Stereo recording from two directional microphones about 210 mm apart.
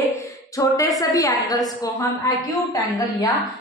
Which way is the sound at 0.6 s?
15° left (ahead or behind).